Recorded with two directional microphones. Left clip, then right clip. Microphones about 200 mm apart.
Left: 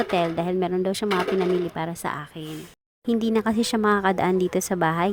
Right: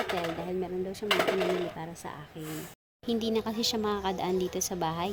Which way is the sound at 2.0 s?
35° left (ahead or behind).